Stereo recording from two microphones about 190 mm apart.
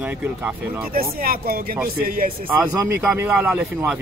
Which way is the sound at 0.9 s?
50° right (ahead or behind).